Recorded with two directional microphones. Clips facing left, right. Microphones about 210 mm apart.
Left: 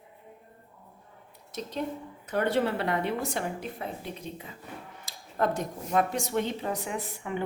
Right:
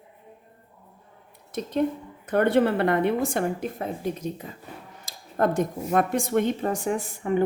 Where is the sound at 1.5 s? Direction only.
55° right (ahead or behind).